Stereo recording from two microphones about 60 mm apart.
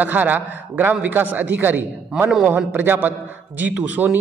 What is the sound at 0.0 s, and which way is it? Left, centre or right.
A man's voice, right.